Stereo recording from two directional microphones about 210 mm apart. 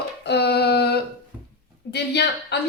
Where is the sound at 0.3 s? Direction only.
50° left (ahead or behind).